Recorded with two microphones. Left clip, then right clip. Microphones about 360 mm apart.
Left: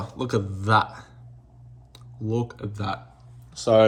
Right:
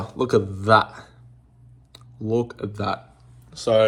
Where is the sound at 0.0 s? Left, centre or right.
Centre.